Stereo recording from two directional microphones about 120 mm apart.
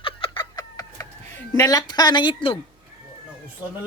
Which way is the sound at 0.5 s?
30° left (ahead or behind).